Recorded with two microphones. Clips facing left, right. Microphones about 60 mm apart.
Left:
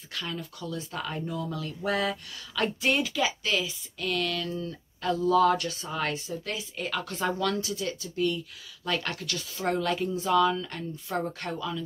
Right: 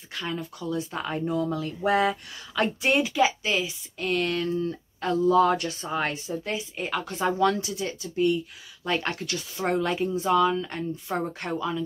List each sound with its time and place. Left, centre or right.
0.1 s speech: centre
4.0 s speech: right